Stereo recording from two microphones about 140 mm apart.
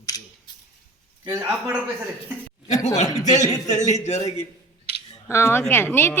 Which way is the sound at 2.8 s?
55° left (ahead or behind).